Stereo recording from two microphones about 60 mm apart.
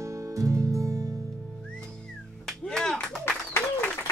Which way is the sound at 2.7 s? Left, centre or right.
Centre.